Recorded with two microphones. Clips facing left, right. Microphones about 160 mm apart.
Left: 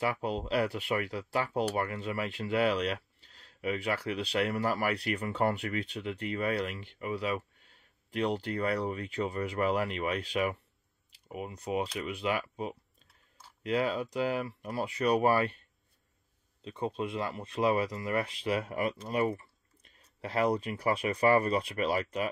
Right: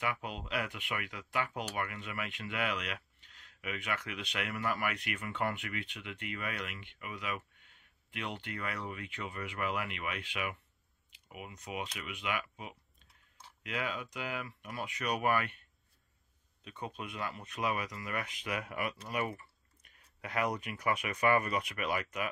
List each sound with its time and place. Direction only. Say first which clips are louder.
0.0 s speech: left 6 dB; 35° left (ahead or behind)
16.6 s speech: left 9 dB; 30° left (ahead or behind)